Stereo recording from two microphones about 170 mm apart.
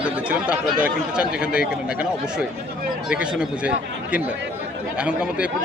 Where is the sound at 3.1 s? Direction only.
5° right (ahead or behind).